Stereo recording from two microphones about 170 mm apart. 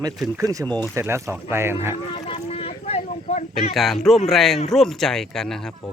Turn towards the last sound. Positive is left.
turn(degrees=0)  # may be behind; listen again after turning